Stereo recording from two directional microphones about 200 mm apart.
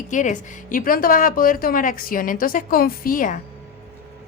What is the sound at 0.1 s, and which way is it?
A woman's voice, 40° left (ahead or behind).